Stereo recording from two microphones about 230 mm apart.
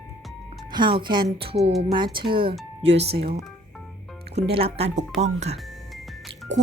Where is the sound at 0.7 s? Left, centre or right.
Centre.